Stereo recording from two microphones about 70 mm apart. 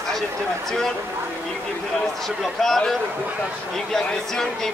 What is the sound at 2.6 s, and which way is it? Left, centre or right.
A man's voice, centre.